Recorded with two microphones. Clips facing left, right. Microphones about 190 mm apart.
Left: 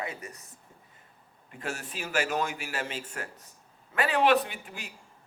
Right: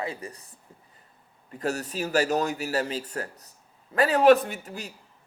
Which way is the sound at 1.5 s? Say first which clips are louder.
Right 8 dB; 40° right (ahead or behind).